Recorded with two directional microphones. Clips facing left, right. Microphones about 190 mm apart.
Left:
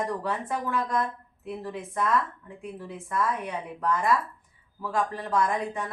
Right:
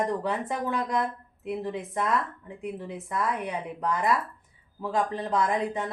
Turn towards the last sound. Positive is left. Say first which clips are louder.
# right 1 dB
turn(degrees=-20)  # may be behind; listen again after turning